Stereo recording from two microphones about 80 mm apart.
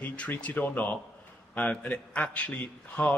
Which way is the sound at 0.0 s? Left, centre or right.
Centre.